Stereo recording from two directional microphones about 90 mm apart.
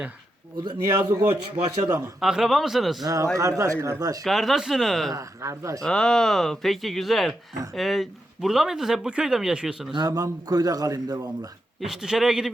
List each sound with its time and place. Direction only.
0.9 s speech: 35° right (ahead or behind)
2.2 s speech: centre (ahead or behind)
3.0 s speech: 40° right (ahead or behind)
4.2 s speech: centre (ahead or behind)
5.1 s speech: 35° right (ahead or behind)
5.8 s speech: 10° left (ahead or behind); by 9.9 s 10° right (ahead or behind)
9.9 s a man's voice: 50° right (ahead or behind)
11.8 s speech: centre (ahead or behind)